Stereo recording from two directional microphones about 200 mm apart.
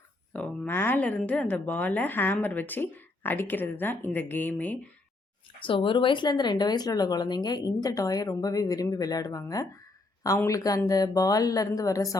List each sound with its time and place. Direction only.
0.3 s speech: 5° left (ahead or behind)
5.6 s speech: 25° left (ahead or behind)